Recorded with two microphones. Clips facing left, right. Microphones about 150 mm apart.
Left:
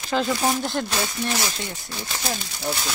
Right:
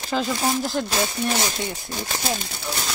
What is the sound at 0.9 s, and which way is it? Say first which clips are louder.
Speech: right 2 dB; 25° right (ahead or behind).